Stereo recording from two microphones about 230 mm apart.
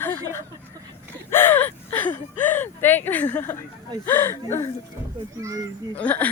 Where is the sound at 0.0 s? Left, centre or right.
Centre.